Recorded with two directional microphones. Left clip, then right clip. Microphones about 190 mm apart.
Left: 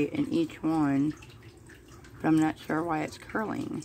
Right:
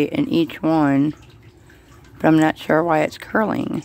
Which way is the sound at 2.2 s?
50° right (ahead or behind).